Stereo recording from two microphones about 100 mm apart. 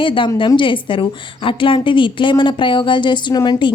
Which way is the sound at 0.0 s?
60° left (ahead or behind).